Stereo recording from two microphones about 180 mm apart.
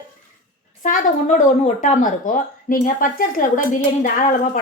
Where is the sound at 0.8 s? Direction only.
45° left (ahead or behind).